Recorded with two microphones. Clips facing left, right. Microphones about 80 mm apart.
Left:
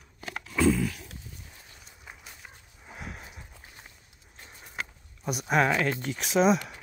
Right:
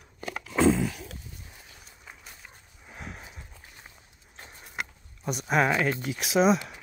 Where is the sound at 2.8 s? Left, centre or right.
Centre.